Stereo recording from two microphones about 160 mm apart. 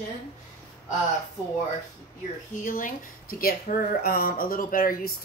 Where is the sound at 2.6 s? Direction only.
60° left (ahead or behind).